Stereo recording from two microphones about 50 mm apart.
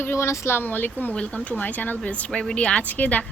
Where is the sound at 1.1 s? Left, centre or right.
Left.